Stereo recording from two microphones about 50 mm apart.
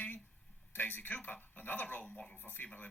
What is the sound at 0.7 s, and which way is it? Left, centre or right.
Speech, left.